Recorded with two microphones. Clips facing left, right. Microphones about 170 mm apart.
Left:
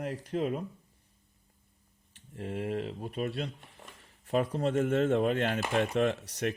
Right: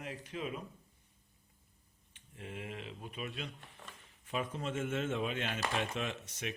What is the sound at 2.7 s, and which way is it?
Speech, 60° left (ahead or behind).